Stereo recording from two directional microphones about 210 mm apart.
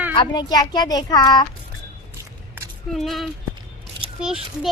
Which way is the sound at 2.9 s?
Centre (ahead or behind).